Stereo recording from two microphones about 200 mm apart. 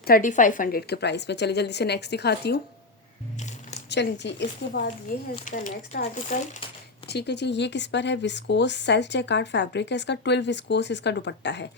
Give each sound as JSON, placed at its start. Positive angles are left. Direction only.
{"t": 0.1, "sound": "speech", "side_deg": 40}
{"t": 3.8, "sound": "speech", "side_deg": 60}
{"t": 5.0, "sound": "speech", "side_deg": 40}
{"t": 7.1, "sound": "speech", "side_deg": 55}